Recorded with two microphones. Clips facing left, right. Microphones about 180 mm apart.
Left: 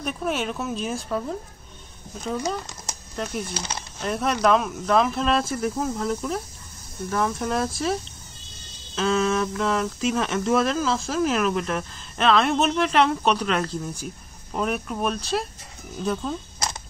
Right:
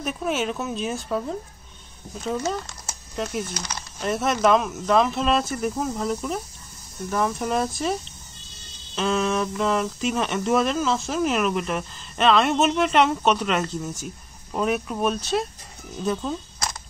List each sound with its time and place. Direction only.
0.0 s speech: centre (ahead or behind)
2.2 s speech: centre (ahead or behind)
3.5 s speech: 30° left (ahead or behind)
4.0 s speech: centre (ahead or behind)